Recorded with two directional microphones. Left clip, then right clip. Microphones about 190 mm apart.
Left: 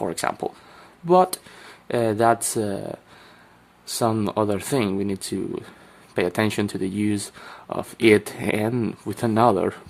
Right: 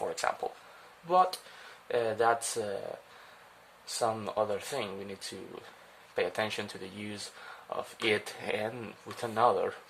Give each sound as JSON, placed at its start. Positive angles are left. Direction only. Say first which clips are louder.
{"t": 0.0, "sound": "speech", "louder": "left 7 dB", "side_deg": 35}
{"t": 3.9, "sound": "speech", "louder": "left 8 dB", "side_deg": 40}
{"t": 6.1, "sound": "speech", "louder": "left 9 dB", "side_deg": 40}